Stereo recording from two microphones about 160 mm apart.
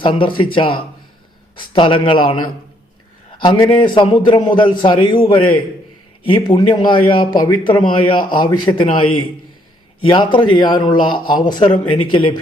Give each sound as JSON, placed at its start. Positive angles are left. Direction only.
{"t": 0.0, "sound": "speech", "side_deg": 30}
{"t": 3.4, "sound": "a man's voice", "side_deg": 30}